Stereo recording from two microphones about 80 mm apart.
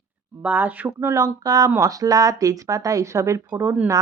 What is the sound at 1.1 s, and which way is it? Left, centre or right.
A woman's voice, right.